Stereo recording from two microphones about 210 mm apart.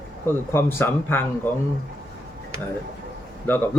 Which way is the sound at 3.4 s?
10° left (ahead or behind).